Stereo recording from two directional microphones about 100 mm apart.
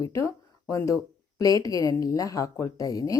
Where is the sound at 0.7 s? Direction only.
30° left (ahead or behind).